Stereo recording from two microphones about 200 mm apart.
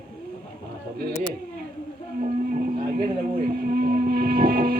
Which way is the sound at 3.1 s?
50° right (ahead or behind).